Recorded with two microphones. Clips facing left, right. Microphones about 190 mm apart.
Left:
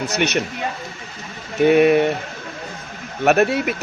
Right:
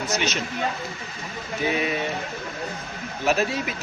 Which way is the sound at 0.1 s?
65° left (ahead or behind).